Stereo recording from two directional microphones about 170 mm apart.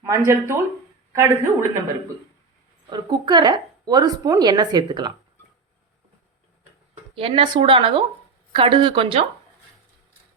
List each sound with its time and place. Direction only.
0.0 s a woman's voice: 15° right (ahead or behind)
2.9 s a woman's voice: 25° right (ahead or behind)
6.9 s speech: 35° right (ahead or behind)